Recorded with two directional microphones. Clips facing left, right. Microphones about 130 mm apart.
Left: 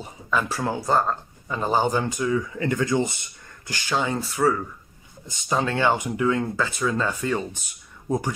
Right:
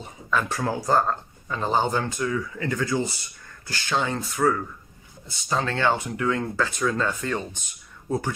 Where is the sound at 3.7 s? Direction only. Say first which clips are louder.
Left 1 dB; 10° left (ahead or behind).